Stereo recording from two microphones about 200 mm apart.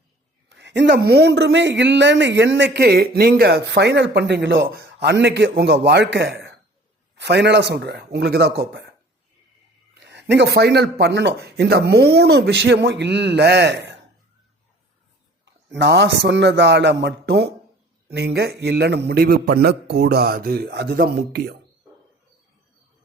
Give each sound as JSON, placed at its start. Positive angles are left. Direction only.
{"t": 0.4, "sound": "speech", "side_deg": -60}
{"t": 10.0, "sound": "speech", "side_deg": -60}
{"t": 15.4, "sound": "a man's voice", "side_deg": -60}